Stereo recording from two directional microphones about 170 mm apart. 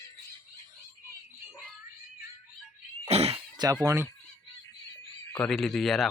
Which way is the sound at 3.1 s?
40° right (ahead or behind).